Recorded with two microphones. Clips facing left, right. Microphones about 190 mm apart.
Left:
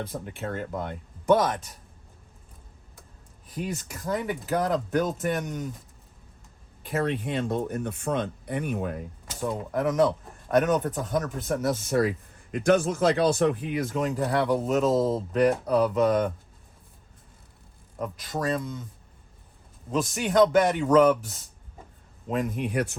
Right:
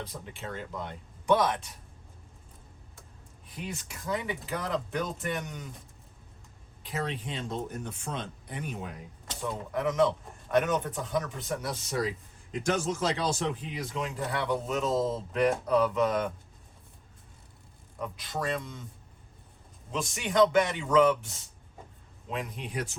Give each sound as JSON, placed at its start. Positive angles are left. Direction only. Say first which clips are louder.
{"t": 0.0, "sound": "speech", "louder": "left 7 dB", "side_deg": 55}
{"t": 3.5, "sound": "speech", "louder": "left 7 dB", "side_deg": 40}
{"t": 6.8, "sound": "speech", "louder": "left 7 dB", "side_deg": 55}
{"t": 9.7, "sound": "speech", "louder": "left 3 dB", "side_deg": 40}
{"t": 18.0, "sound": "speech", "louder": "left 4 dB", "side_deg": 45}
{"t": 19.9, "sound": "speech", "louder": "left 6 dB", "side_deg": 40}
{"t": 22.3, "sound": "speech", "louder": "left 8 dB", "side_deg": 50}